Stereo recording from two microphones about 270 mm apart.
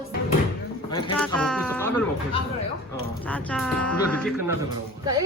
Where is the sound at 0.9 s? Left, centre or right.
Centre.